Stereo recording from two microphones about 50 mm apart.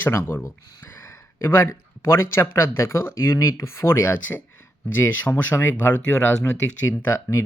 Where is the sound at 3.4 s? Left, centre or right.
Left.